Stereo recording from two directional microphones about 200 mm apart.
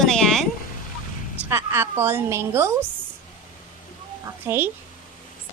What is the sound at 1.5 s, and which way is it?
A woman's voice, 10° right (ahead or behind).